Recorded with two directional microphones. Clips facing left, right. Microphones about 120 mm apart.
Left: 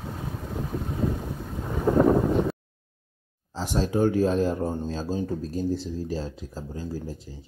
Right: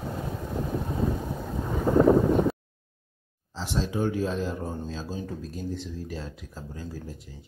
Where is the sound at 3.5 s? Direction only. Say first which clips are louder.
Left 4 dB; 45° left (ahead or behind).